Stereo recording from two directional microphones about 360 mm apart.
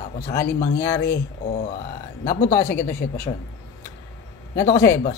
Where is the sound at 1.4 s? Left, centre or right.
Left.